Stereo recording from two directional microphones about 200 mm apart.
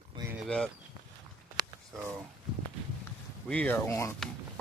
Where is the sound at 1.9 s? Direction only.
5° right (ahead or behind).